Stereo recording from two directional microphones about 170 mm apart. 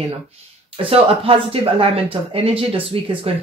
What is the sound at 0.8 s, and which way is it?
Speech, 35° right (ahead or behind).